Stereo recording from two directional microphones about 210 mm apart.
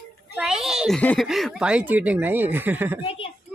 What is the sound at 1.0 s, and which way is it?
Speech, 5° left (ahead or behind).